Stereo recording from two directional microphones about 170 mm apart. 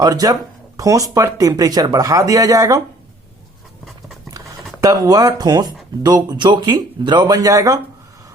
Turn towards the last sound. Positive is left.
turn(degrees=-20)  # may be behind; listen again after turning